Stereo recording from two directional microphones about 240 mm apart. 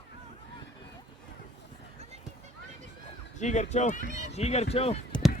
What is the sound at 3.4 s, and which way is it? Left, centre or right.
Speech, left.